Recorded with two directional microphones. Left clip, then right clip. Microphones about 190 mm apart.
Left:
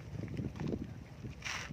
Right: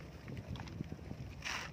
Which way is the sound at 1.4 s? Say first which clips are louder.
Left 1 dB; 10° left (ahead or behind).